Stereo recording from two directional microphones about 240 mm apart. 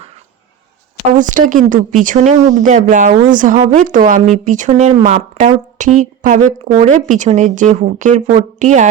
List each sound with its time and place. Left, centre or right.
1.1 s a woman's voice: right